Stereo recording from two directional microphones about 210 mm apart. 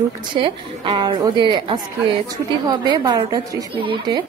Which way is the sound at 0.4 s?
20° right (ahead or behind).